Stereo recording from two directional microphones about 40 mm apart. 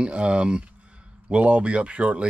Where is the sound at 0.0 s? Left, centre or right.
Right.